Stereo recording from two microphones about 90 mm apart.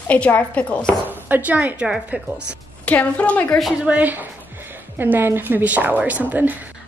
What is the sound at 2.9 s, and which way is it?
Speech, 15° left (ahead or behind).